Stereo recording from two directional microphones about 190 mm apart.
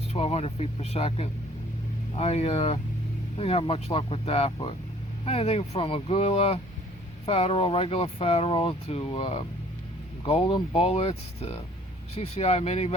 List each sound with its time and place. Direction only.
0.1 s speech: 35° left (ahead or behind)